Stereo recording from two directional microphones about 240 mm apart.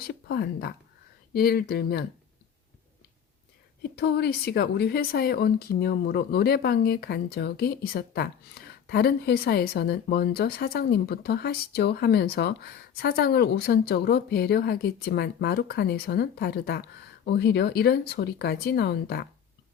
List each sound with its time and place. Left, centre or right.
0.1 s a woman's voice: left
3.9 s a woman's voice: left